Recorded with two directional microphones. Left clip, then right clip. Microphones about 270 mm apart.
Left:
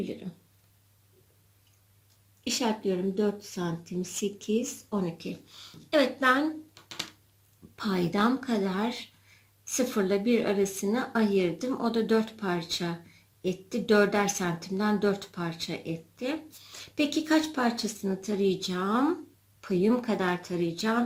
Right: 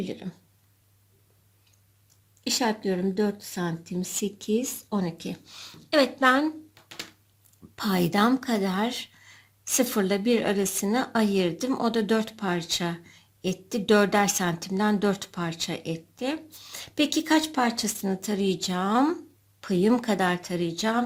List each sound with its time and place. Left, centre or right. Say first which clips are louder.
0.0 s speech: right 2 dB; right
2.4 s speech: right 3 dB; right
7.8 s speech: right 4 dB; right